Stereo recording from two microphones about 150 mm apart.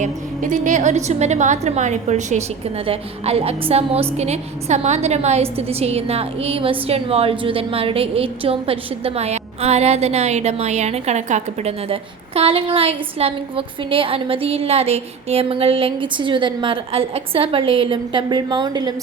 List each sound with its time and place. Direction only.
0.0 s a woman's voice: 55° right (ahead or behind)
2.8 s a woman's voice: 40° right (ahead or behind)